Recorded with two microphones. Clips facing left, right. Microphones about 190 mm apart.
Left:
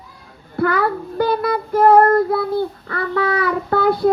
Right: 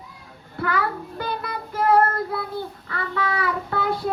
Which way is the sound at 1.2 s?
65° left (ahead or behind).